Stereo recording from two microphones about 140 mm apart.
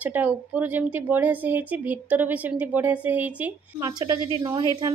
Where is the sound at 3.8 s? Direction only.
30° right (ahead or behind).